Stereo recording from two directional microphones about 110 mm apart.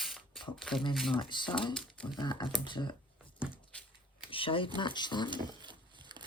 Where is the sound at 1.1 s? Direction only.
45° left (ahead or behind).